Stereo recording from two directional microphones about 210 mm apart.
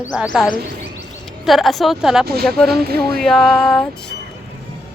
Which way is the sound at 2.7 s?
50° right (ahead or behind).